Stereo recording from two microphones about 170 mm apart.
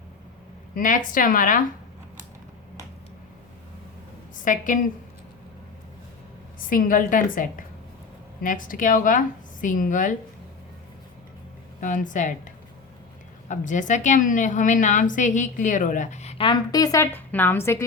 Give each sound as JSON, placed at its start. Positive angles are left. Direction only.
{"t": 0.8, "sound": "a woman's voice", "side_deg": 50}
{"t": 4.4, "sound": "a woman's voice", "side_deg": 50}
{"t": 6.7, "sound": "a woman's voice", "side_deg": 55}
{"t": 11.8, "sound": "a woman's voice", "side_deg": 50}
{"t": 13.5, "sound": "a woman's voice", "side_deg": 45}
{"t": 16.4, "sound": "a woman's voice", "side_deg": 25}